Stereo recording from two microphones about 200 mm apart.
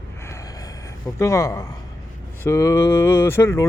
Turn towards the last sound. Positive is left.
turn(degrees=15)  # may be behind; listen again after turning